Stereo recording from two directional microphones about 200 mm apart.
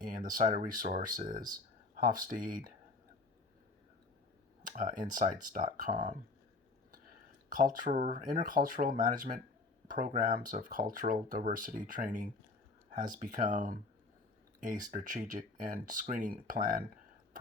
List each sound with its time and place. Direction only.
0.3 s speech: 40° right (ahead or behind)
4.6 s speech: 40° right (ahead or behind)
7.5 s speech: 40° right (ahead or behind)